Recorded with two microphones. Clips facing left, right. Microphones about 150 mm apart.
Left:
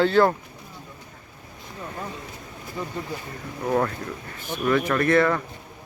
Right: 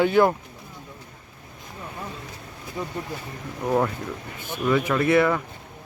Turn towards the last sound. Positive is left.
turn(degrees=-10)  # may be behind; listen again after turning